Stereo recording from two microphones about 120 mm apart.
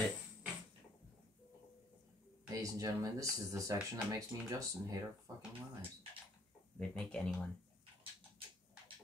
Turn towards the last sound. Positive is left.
turn(degrees=5)  # may be behind; listen again after turning